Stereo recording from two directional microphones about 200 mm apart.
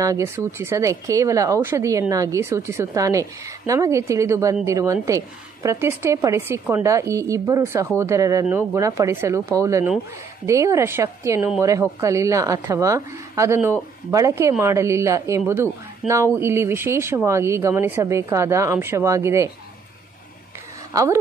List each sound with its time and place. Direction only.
0.0 s speech: 15° right (ahead or behind)
20.9 s speech: 15° right (ahead or behind)